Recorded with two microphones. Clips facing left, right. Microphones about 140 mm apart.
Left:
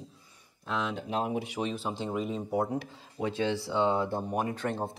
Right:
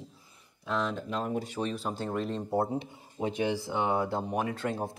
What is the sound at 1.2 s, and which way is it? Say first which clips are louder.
Speech: left 3 dB; 40° right (ahead or behind).